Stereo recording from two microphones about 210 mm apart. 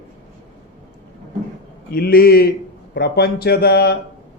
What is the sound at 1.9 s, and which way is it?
A man's voice, 45° left (ahead or behind).